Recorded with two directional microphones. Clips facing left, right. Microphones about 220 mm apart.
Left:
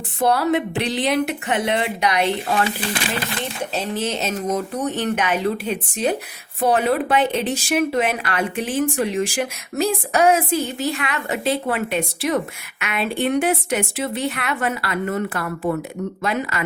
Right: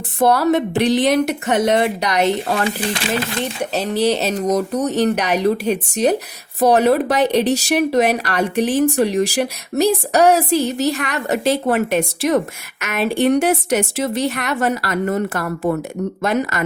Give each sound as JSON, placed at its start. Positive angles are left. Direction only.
{"t": 0.2, "sound": "speech", "side_deg": -45}
{"t": 3.8, "sound": "speech", "side_deg": -35}